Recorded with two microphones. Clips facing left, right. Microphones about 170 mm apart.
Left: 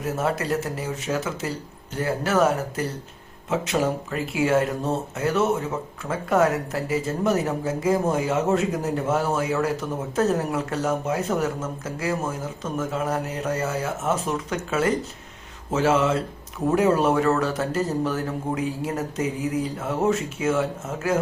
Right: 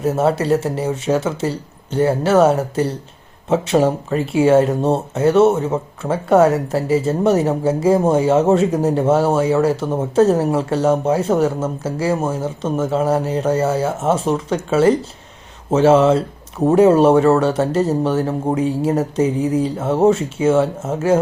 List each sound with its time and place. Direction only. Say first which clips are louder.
0.0 s speech: right 8 dB; 30° right (ahead or behind)